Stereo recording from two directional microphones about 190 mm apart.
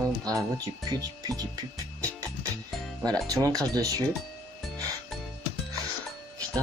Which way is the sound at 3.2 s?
20° right (ahead or behind).